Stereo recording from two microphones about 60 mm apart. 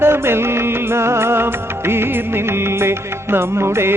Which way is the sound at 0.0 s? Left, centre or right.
Right.